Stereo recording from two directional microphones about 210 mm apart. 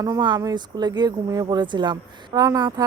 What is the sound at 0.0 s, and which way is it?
Speech, 20° right (ahead or behind).